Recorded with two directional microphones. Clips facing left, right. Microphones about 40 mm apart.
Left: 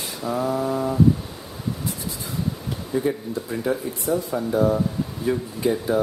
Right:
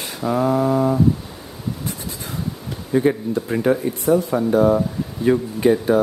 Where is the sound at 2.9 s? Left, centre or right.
Right.